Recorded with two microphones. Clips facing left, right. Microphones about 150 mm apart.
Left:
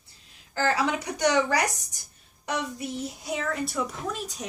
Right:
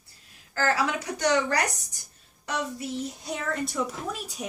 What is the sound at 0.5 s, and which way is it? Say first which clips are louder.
A woman's voice: left 1 dB; 20° left (ahead or behind).